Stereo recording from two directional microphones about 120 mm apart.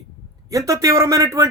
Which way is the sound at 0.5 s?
30° right (ahead or behind).